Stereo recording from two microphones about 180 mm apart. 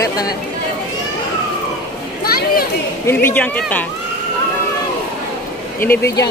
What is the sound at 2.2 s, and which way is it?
Chatter, 55° left (ahead or behind).